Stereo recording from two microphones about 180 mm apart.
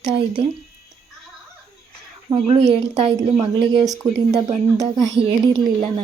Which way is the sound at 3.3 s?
20° right (ahead or behind).